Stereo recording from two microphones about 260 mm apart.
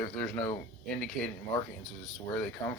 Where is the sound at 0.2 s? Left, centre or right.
Centre.